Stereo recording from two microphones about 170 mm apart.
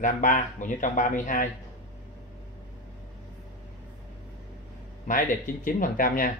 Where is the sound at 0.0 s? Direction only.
50° left (ahead or behind).